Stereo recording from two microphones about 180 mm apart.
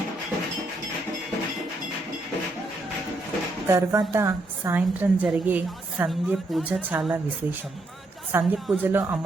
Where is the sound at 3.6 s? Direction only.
15° right (ahead or behind).